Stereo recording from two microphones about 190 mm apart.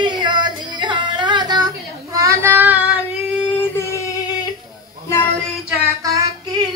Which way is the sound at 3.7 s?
15° left (ahead or behind).